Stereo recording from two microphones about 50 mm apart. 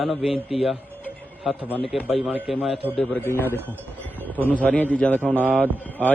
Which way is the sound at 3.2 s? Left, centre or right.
Left.